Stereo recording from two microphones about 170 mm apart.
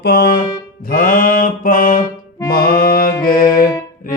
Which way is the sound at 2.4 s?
60° left (ahead or behind).